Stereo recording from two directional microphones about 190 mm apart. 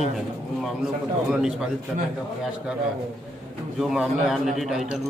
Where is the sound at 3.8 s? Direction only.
Centre (ahead or behind).